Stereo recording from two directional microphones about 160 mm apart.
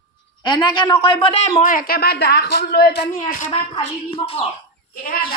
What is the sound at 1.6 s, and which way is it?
Speech, 60° left (ahead or behind).